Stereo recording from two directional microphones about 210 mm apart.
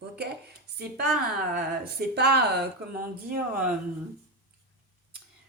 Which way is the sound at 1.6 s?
50° right (ahead or behind).